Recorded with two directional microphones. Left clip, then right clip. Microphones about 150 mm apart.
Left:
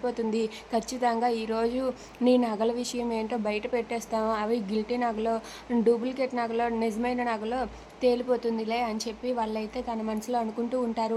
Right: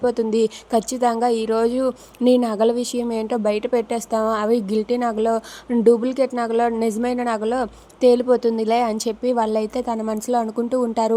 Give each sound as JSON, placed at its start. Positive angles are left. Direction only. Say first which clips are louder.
{"t": 0.0, "sound": "a woman's voice", "louder": "right 10 dB", "side_deg": -40}